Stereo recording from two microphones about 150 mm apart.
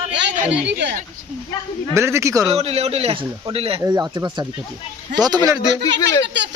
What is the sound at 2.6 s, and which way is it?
A man's voice, 40° right (ahead or behind).